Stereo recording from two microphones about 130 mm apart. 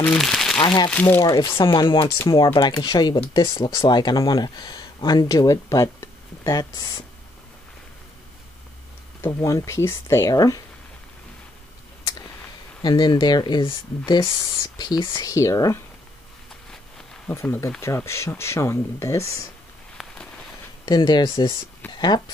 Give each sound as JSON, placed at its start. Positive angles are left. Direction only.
{"t": 0.0, "sound": "crumpling", "side_deg": 5}
{"t": 0.6, "sound": "speech", "side_deg": 35}
{"t": 0.8, "sound": "speech", "side_deg": 15}
{"t": 1.3, "sound": "speech", "side_deg": 40}
{"t": 9.2, "sound": "speech", "side_deg": 25}
{"t": 12.8, "sound": "speech", "side_deg": 35}
{"t": 17.3, "sound": "speech", "side_deg": 20}
{"t": 20.8, "sound": "speech", "side_deg": 35}
{"t": 21.9, "sound": "a sound", "side_deg": 35}